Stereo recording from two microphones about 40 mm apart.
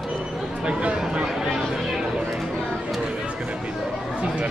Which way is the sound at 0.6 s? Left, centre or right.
Right.